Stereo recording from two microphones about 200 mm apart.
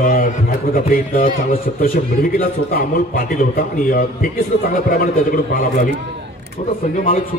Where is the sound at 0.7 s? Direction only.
45° left (ahead or behind).